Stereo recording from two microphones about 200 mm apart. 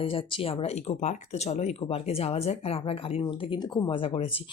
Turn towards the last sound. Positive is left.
turn(degrees=25)  # may be behind; listen again after turning